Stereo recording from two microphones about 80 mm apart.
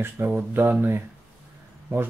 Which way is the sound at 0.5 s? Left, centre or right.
Right.